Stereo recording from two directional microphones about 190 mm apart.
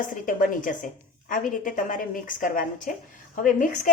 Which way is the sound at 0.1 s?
45° left (ahead or behind).